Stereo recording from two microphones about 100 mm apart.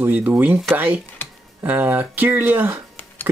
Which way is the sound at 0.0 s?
20° right (ahead or behind).